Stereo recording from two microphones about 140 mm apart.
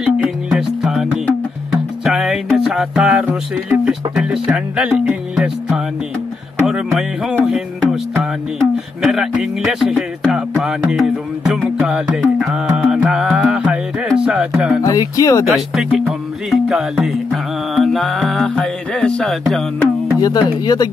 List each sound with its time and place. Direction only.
0.0 s music: 5° right (ahead or behind)
2.0 s music: 5° right (ahead or behind)
14.8 s speech: 25° left (ahead or behind)
15.4 s music: centre (ahead or behind)
20.2 s speech: 30° left (ahead or behind)